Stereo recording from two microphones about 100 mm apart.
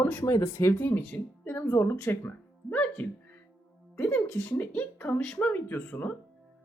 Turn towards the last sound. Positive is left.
turn(degrees=20)  # may be behind; listen again after turning